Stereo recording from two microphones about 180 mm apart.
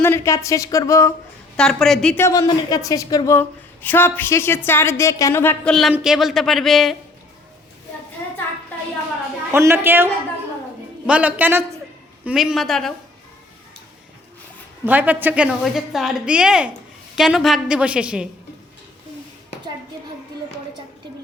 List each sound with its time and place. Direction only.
0.0 s speech: 15° left (ahead or behind)
1.5 s a woman's voice: 5° left (ahead or behind)
2.2 s speech: 20° left (ahead or behind)
5.9 s a woman's voice: 5° right (ahead or behind)
9.5 s a man's voice: 15° right (ahead or behind)
14.8 s a woman's voice: 10° right (ahead or behind)